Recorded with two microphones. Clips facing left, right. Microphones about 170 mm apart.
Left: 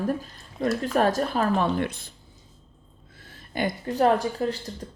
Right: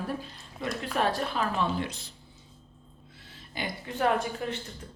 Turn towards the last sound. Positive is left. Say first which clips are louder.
# left 6 dB
turn(degrees=35)  # may be behind; listen again after turning